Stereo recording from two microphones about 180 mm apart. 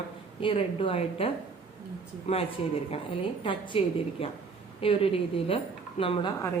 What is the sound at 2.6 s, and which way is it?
A woman's voice, 35° left (ahead or behind).